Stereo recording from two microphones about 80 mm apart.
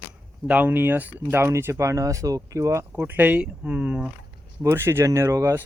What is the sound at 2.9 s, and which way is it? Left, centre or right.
Speech, right.